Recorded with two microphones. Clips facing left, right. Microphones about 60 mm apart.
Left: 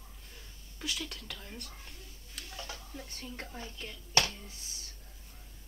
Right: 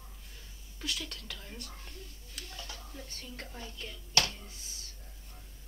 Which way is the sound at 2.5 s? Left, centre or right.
Centre.